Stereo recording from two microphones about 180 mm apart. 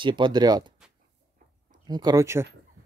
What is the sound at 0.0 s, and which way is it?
Speech, 25° right (ahead or behind).